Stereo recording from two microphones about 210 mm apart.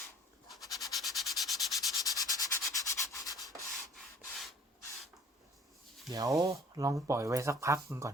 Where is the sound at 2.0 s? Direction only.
15° left (ahead or behind).